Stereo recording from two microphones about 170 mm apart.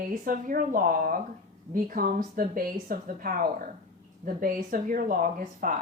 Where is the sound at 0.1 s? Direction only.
55° right (ahead or behind).